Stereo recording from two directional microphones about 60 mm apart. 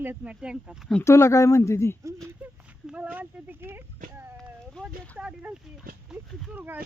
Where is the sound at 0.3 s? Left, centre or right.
Centre.